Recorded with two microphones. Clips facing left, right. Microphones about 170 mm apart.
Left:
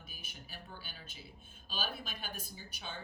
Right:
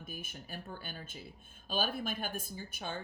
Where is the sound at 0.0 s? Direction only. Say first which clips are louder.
Right 8 dB; 50° right (ahead or behind).